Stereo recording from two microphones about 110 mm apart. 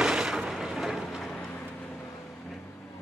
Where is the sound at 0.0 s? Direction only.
5° right (ahead or behind).